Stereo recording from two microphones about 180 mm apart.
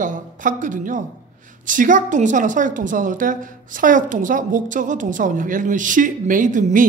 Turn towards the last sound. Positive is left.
turn(degrees=-45)  # may be behind; listen again after turning